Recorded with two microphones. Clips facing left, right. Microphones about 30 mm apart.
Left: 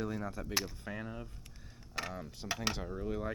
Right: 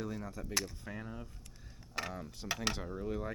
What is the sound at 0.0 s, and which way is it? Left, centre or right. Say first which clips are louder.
Speech: left 3 dB; centre.